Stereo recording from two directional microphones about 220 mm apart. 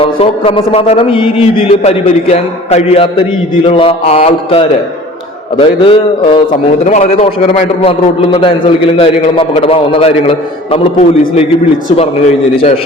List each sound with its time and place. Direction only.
0.0 s a man's voice: 25° left (ahead or behind)